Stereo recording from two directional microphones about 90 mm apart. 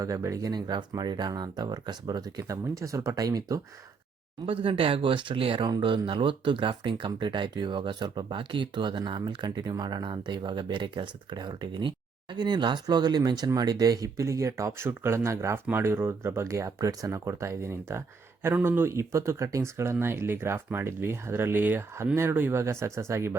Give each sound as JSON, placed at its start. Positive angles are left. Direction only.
{"t": 0.0, "sound": "speech", "side_deg": -35}
{"t": 4.4, "sound": "speech", "side_deg": -80}